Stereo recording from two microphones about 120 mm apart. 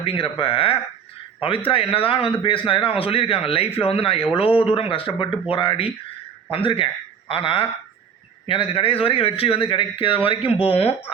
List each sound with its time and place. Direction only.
0.0 s a man's voice: 50° left (ahead or behind)